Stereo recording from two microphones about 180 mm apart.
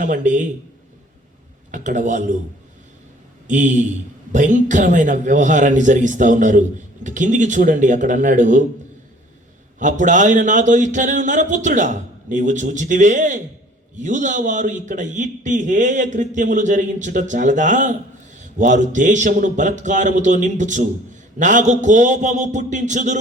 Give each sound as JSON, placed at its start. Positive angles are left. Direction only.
{"t": 0.0, "sound": "a man's voice", "side_deg": -45}
{"t": 1.7, "sound": "a man's voice", "side_deg": -45}
{"t": 3.4, "sound": "a man's voice", "side_deg": -45}
{"t": 9.7, "sound": "a man's voice", "side_deg": -45}